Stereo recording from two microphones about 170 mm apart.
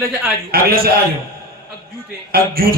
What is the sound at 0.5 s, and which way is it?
Speech, 60° right (ahead or behind).